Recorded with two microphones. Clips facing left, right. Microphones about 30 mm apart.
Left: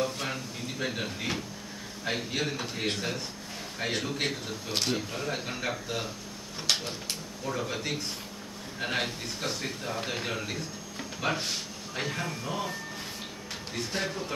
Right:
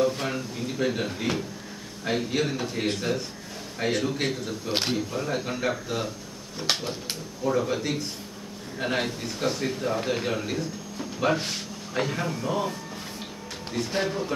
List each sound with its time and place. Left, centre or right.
0.0 s a man's voice: centre
6.7 s speech: centre
7.5 s a man's voice: centre
13.9 s speech: centre